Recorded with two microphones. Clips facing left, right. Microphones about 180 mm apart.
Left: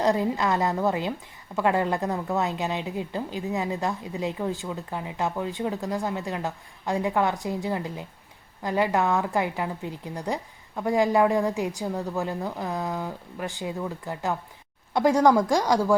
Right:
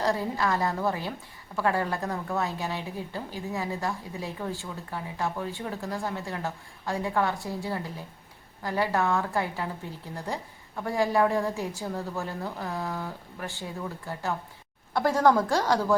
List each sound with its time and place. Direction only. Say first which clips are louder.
0.0 s a woman's voice: left 4 dB; 20° left (ahead or behind)